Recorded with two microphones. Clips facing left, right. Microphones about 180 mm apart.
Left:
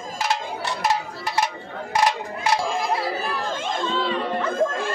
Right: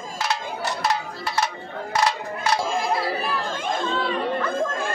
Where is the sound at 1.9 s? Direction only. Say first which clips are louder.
Left 2 dB; 20° left (ahead or behind).